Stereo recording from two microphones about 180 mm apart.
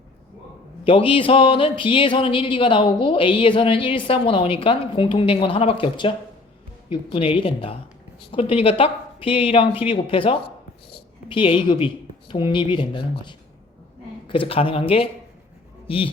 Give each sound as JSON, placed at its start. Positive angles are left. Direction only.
{"t": 0.9, "sound": "a woman's voice", "side_deg": 30}